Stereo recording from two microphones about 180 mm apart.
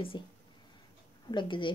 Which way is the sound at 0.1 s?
25° left (ahead or behind).